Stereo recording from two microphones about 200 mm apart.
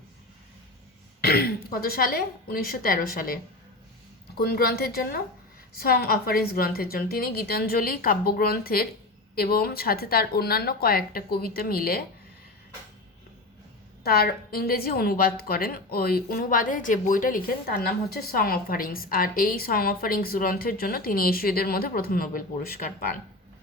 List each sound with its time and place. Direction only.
1.2 s a woman's voice: 50° left (ahead or behind)
14.0 s a woman's voice: 50° left (ahead or behind)